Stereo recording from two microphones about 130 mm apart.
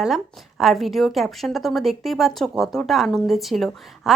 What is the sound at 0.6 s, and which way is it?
A woman's voice, centre (ahead or behind).